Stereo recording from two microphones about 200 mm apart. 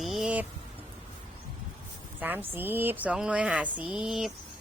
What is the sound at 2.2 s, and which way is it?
Speech, 10° right (ahead or behind).